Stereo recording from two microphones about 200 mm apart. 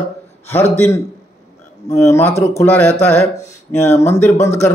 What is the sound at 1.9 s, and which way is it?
Speech, 15° left (ahead or behind).